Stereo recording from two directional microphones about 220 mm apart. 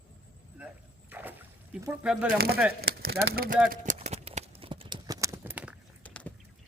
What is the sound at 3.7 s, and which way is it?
Clip-clop, 35° right (ahead or behind).